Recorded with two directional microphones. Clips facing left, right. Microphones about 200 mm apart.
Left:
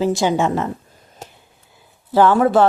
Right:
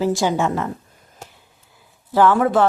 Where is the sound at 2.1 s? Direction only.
30° left (ahead or behind).